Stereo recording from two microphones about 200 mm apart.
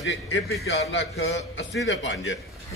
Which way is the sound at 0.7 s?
60° left (ahead or behind).